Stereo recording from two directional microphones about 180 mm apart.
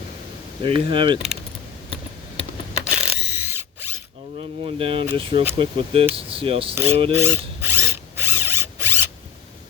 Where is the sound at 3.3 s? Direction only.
10° right (ahead or behind).